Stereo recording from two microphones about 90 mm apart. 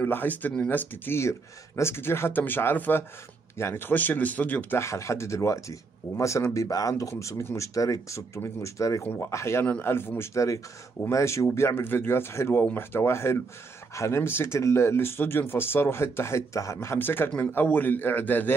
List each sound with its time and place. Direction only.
0.0 s speech: 20° left (ahead or behind)